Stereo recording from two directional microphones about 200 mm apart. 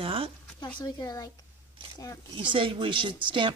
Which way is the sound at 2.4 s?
25° right (ahead or behind).